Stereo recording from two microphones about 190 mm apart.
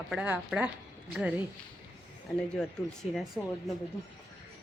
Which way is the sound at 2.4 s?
5° left (ahead or behind).